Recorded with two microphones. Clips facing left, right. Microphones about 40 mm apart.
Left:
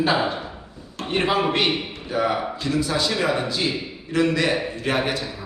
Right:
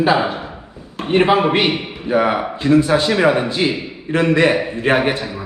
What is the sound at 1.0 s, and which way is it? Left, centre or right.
A man's voice, right.